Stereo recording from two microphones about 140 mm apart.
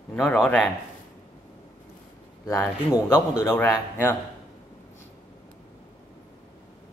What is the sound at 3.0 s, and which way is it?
Speech, 15° left (ahead or behind).